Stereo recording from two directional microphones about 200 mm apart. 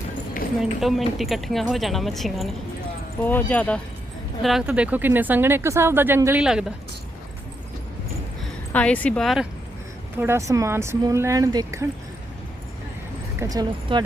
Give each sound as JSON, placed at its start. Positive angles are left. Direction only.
{"t": 0.6, "sound": "speech", "side_deg": 0}
{"t": 4.4, "sound": "speech", "side_deg": -5}
{"t": 8.7, "sound": "speech", "side_deg": 5}
{"t": 10.2, "sound": "speech", "side_deg": -15}
{"t": 13.4, "sound": "speech", "side_deg": -20}